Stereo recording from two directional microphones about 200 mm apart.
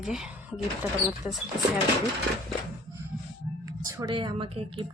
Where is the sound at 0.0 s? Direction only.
5° right (ahead or behind).